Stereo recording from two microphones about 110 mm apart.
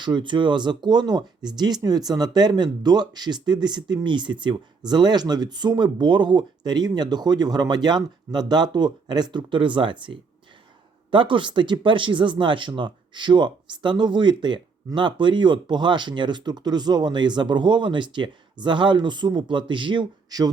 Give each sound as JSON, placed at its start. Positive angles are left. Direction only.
{"t": 0.0, "sound": "speech", "side_deg": -45}